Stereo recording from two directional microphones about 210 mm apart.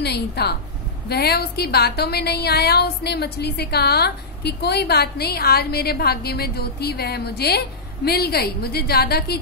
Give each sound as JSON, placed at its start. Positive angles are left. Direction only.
{"t": 0.0, "sound": "a woman's voice", "side_deg": 50}